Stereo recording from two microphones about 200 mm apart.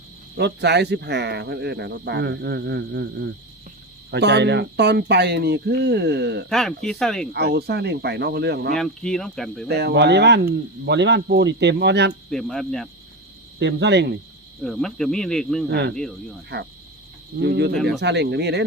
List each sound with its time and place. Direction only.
0.3 s speech: 55° right (ahead or behind)
6.5 s speech: 5° left (ahead or behind)
7.3 s speech: 55° right (ahead or behind)
8.7 s speech: 5° left (ahead or behind)
9.6 s speech: 55° right (ahead or behind)
12.3 s speech: centre (ahead or behind)
13.6 s speech: 60° right (ahead or behind)
14.6 s speech: centre (ahead or behind)
15.7 s speech: 55° right (ahead or behind)
16.0 s speech: 5° left (ahead or behind)
17.3 s speech: 55° right (ahead or behind)